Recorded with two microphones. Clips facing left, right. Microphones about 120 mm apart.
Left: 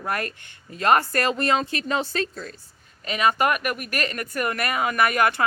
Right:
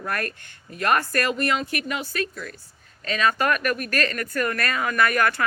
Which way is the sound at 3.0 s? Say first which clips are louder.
Left 1 dB; 15° left (ahead or behind).